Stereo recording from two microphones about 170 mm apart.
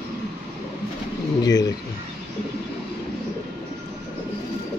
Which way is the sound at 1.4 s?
20° left (ahead or behind).